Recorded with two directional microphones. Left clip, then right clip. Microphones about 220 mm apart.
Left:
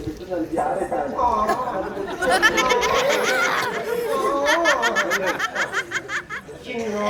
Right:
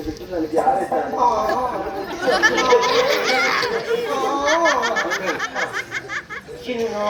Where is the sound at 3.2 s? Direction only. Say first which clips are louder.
Right 2 dB; 40° left (ahead or behind).